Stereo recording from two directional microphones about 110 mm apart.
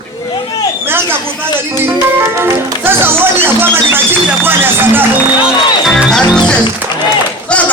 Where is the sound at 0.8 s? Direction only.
20° right (ahead or behind).